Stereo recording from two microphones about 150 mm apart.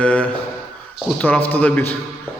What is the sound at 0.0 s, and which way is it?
A man's voice, 10° left (ahead or behind).